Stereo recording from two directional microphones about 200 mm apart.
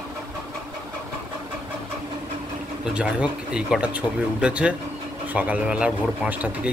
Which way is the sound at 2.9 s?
5° right (ahead or behind).